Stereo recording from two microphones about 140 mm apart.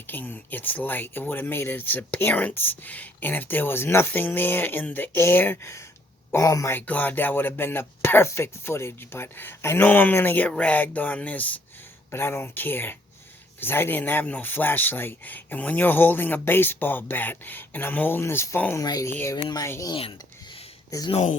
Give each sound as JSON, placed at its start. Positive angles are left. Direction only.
{"t": 0.1, "sound": "speech", "side_deg": 15}
{"t": 18.9, "sound": "speech", "side_deg": 25}
{"t": 19.9, "sound": "a sound", "side_deg": 40}
{"t": 21.1, "sound": "speech", "side_deg": 50}